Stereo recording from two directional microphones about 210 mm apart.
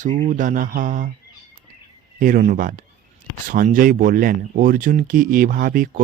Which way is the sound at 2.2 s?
40° right (ahead or behind).